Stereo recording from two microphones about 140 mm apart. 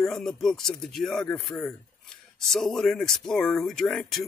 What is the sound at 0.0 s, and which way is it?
Speech, 5° left (ahead or behind).